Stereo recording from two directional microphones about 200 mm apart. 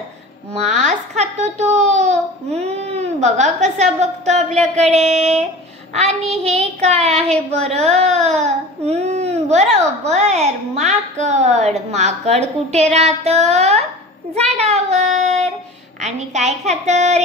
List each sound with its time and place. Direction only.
0.6 s a sound: 35° right (ahead or behind)
4.7 s a child's voice: 35° right (ahead or behind)
8.4 s child singing: 30° right (ahead or behind)
9.8 s a child's voice: 35° right (ahead or behind)
14.3 s child singing: 30° right (ahead or behind)
16.0 s a child's voice: 35° right (ahead or behind)